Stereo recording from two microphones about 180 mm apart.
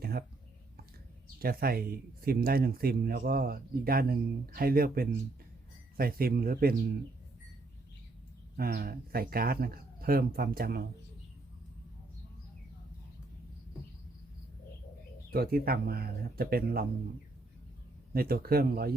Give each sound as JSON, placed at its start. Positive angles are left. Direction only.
{"t": 0.0, "sound": "a sound", "side_deg": -60}
{"t": 1.4, "sound": "speech", "side_deg": -55}
{"t": 8.5, "sound": "speech", "side_deg": -55}
{"t": 15.3, "sound": "speech", "side_deg": -55}
{"t": 18.1, "sound": "speech", "side_deg": -55}